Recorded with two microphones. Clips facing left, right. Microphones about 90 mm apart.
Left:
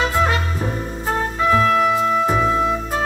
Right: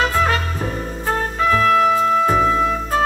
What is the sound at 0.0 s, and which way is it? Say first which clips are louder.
Music: right 1 dB; 20° left (ahead or behind).